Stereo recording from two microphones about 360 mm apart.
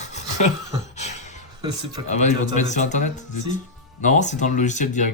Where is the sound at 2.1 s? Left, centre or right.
Centre.